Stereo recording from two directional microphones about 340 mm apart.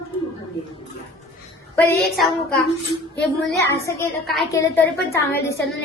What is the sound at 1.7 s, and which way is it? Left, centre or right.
Speech, centre.